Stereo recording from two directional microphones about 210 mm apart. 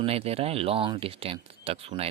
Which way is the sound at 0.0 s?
30° right (ahead or behind).